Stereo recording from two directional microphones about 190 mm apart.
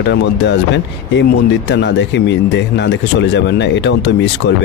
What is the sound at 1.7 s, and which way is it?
Speech, 65° left (ahead or behind).